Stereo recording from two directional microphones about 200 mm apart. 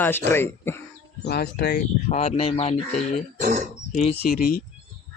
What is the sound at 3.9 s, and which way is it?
Speech, 30° left (ahead or behind).